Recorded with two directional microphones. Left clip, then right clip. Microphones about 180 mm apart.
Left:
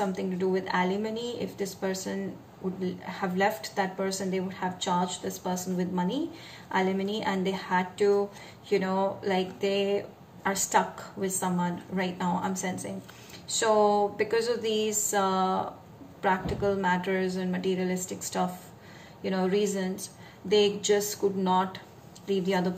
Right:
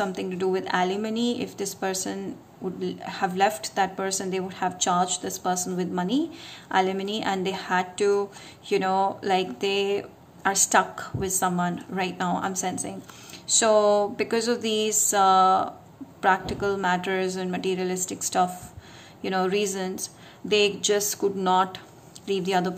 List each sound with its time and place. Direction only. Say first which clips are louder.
0.0 s speech: right 3 dB; 50° right (ahead or behind)